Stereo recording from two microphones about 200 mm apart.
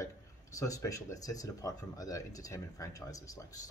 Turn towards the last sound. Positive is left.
turn(degrees=15)  # may be behind; listen again after turning